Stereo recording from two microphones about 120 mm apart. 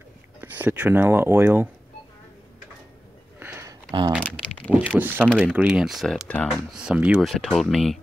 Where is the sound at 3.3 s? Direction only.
20° right (ahead or behind).